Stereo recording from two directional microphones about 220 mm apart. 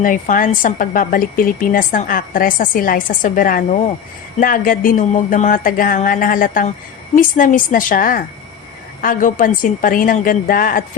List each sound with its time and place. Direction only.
0.0 s a woman's voice: 35° left (ahead or behind)